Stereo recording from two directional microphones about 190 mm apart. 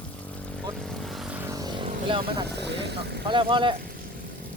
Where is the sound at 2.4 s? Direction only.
60° right (ahead or behind).